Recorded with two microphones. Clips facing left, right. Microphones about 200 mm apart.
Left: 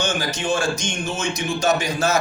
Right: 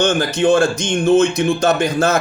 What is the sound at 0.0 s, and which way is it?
Speech, 55° right (ahead or behind).